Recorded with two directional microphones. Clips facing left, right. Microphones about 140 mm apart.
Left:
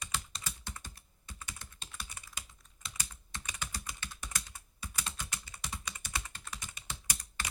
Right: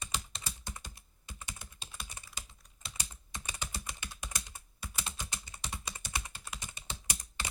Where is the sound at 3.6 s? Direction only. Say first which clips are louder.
Left 1 dB; 15° right (ahead or behind).